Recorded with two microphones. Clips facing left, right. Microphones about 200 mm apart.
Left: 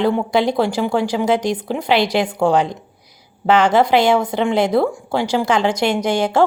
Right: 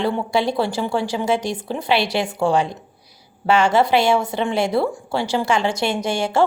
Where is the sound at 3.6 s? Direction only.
15° left (ahead or behind).